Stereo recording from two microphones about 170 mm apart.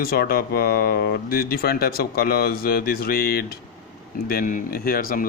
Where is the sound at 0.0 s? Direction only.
60° left (ahead or behind).